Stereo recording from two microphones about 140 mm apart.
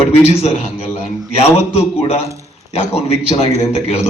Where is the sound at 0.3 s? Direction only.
50° left (ahead or behind).